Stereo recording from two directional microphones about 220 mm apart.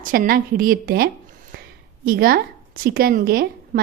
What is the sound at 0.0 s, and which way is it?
A woman's voice, 40° right (ahead or behind).